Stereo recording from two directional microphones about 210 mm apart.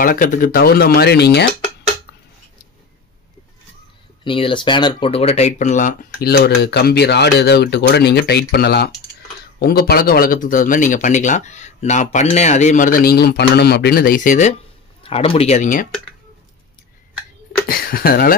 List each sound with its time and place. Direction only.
0.0 s speech: 40° left (ahead or behind)
4.2 s speech: 25° left (ahead or behind)
6.2 s speech: 50° left (ahead or behind)
17.6 s speech: 45° left (ahead or behind)